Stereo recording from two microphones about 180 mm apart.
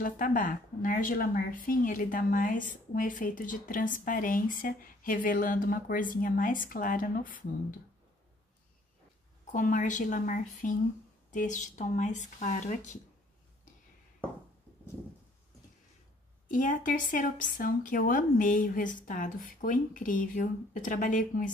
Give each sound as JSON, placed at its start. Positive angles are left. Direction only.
{"t": 0.0, "sound": "a woman's voice", "side_deg": 50}
{"t": 9.5, "sound": "a woman's voice", "side_deg": 45}
{"t": 16.4, "sound": "a woman's voice", "side_deg": 45}